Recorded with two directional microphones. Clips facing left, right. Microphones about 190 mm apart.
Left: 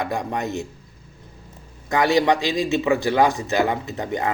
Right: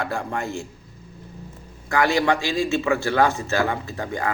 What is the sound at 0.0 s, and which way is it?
Speech, 15° left (ahead or behind).